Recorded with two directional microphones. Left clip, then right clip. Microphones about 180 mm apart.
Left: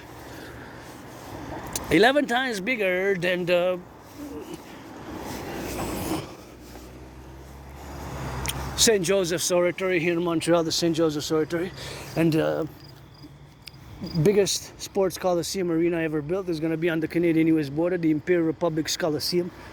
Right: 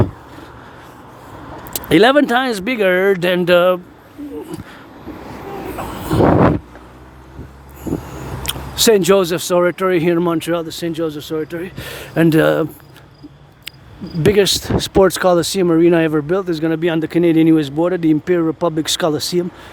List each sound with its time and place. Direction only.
1.7 s speech: 40° right (ahead or behind)
8.4 s speech: 45° right (ahead or behind)
10.5 s speech: 10° right (ahead or behind)
11.8 s speech: 45° right (ahead or behind)
14.2 s speech: 30° right (ahead or behind)